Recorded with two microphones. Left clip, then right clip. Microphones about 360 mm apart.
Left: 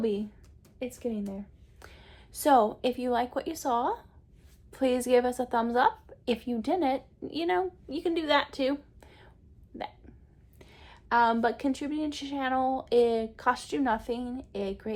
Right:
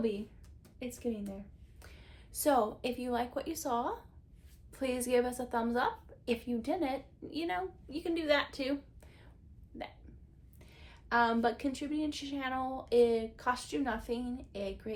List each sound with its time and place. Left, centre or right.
0.8 s a woman's voice: left
10.6 s a woman's voice: left